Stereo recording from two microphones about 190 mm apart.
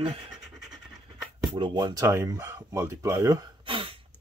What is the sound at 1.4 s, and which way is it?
Speech, 25° right (ahead or behind).